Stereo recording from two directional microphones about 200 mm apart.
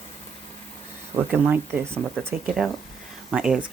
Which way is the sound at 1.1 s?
10° right (ahead or behind).